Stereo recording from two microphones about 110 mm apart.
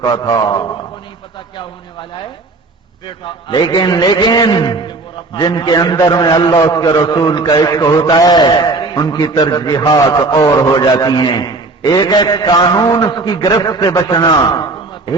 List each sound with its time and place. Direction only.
0.0 s a man's voice: 40° left (ahead or behind)
1.5 s a sound: 45° left (ahead or behind)
3.2 s a man's voice: 45° left (ahead or behind)